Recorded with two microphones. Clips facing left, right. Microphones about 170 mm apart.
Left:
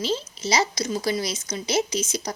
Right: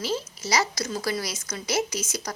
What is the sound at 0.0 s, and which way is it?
Speech, 25° left (ahead or behind).